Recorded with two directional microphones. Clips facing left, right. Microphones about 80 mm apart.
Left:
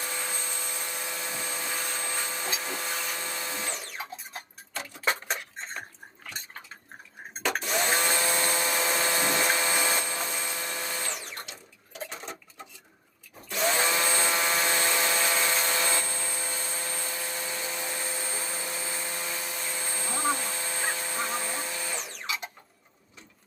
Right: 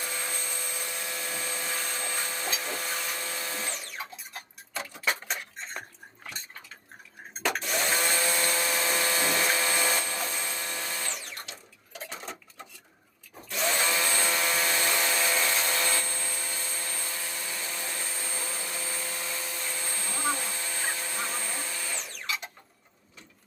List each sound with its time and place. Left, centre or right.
0.0 s rub: centre
1.2 s vacuum cleaner: centre
3.2 s printer: centre
7.6 s vacuum cleaner: left
8.3 s rub: left
8.5 s a sound: centre
10.4 s tools: centre
12.0 s dishes: centre
13.5 s a sound: centre
14.9 s rub: centre
20.5 s a sound: centre
20.9 s music: centre